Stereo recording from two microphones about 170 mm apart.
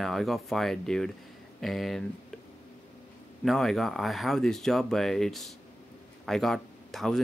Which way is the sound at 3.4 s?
Centre (ahead or behind).